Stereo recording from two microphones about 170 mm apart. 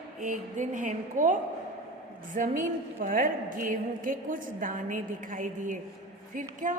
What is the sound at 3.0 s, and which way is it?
A woman's voice, 55° right (ahead or behind).